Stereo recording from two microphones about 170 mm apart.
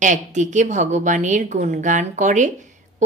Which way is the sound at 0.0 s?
45° right (ahead or behind).